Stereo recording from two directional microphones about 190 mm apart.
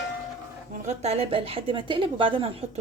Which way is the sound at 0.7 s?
40° right (ahead or behind).